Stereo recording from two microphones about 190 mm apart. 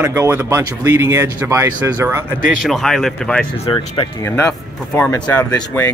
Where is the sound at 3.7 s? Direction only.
25° left (ahead or behind).